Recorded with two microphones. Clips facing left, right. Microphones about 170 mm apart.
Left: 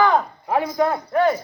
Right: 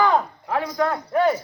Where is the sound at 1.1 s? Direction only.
10° right (ahead or behind).